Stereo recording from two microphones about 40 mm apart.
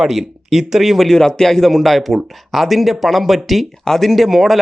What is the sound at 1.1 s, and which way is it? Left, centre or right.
Speech, centre.